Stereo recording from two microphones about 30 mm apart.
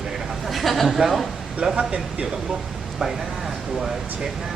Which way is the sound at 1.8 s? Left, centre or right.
Right.